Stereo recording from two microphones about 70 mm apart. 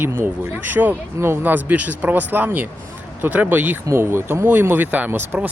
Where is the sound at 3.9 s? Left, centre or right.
Right.